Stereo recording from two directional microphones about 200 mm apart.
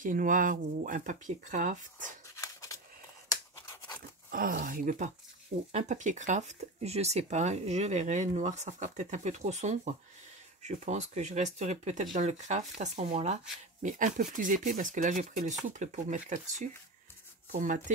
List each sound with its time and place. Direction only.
0.0 s speech: 40° right (ahead or behind)
2.3 s scissors: 15° left (ahead or behind)
4.3 s speech: 45° right (ahead or behind)